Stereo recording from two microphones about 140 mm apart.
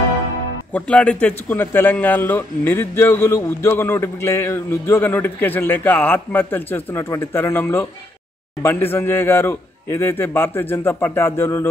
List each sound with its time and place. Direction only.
0.7 s a man's voice: 10° left (ahead or behind)